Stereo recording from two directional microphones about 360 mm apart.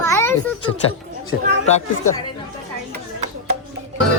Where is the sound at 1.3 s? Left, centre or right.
Centre.